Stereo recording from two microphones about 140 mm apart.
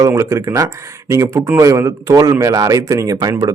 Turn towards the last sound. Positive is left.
turn(degrees=-25)  # may be behind; listen again after turning